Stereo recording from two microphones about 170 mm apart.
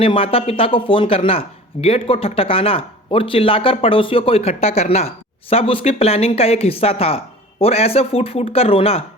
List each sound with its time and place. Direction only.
0.0 s speech: 35° left (ahead or behind)